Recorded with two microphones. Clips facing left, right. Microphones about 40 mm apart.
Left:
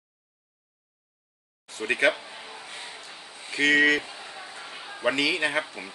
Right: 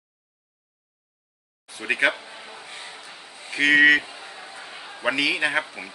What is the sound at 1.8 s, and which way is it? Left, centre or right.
Speech, centre.